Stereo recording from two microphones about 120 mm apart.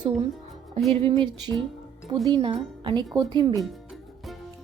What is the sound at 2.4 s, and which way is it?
Speech, 40° right (ahead or behind).